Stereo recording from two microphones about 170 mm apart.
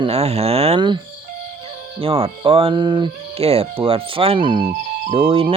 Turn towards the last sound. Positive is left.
turn(degrees=-35)  # may be behind; listen again after turning